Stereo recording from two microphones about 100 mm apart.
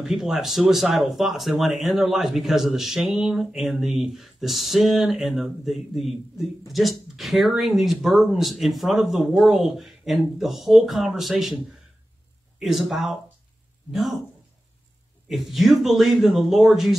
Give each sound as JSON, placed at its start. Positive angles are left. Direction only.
{"t": 0.0, "sound": "speech", "side_deg": -5}
{"t": 12.5, "sound": "speech", "side_deg": 0}
{"t": 15.2, "sound": "speech", "side_deg": 0}